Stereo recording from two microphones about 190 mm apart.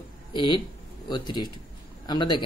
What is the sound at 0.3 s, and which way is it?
Speech, 25° left (ahead or behind).